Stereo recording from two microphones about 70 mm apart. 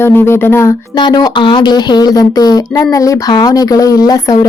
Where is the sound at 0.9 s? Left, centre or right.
Left.